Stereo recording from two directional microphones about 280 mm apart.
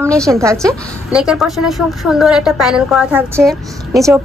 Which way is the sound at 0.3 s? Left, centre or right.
Centre.